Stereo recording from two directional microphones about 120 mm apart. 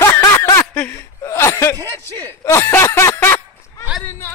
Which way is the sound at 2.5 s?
20° left (ahead or behind).